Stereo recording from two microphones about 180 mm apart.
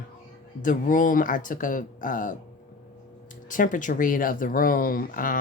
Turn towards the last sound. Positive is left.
turn(degrees=50)  # may be behind; listen again after turning